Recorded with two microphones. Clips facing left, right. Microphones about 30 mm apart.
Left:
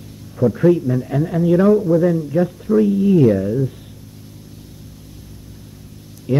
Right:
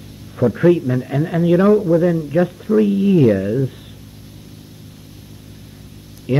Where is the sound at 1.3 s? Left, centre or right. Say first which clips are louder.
Right 1 dB; right.